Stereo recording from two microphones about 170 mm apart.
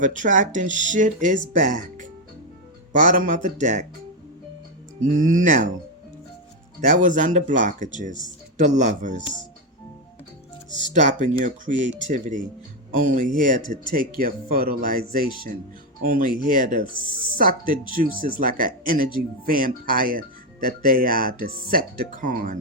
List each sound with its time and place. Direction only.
0.0 s speech: 50° right (ahead or behind)
5.3 s speech: 50° right (ahead or behind)
6.8 s speech: 50° right (ahead or behind)
10.8 s speech: 45° right (ahead or behind)